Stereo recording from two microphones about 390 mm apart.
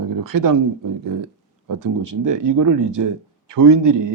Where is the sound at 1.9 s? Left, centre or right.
Right.